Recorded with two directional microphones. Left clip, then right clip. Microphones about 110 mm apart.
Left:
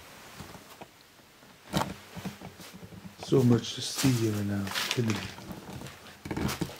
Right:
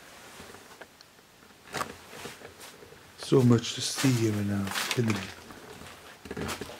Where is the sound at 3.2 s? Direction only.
10° right (ahead or behind).